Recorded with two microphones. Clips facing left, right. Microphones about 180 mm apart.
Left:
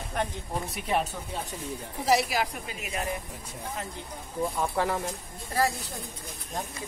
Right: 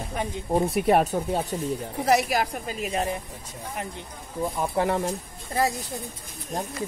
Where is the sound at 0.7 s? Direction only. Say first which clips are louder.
Right 7 dB; 55° right (ahead or behind).